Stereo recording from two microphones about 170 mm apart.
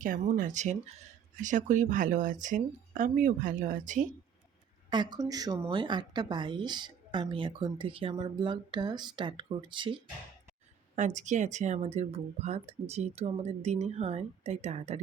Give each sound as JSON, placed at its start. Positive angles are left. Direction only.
{"t": 0.0, "sound": "speech", "side_deg": -50}
{"t": 4.9, "sound": "speech", "side_deg": -25}
{"t": 10.9, "sound": "speech", "side_deg": -45}